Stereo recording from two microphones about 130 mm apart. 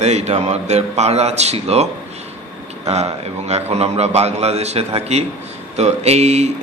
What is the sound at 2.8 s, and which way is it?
A man's voice, 55° right (ahead or behind).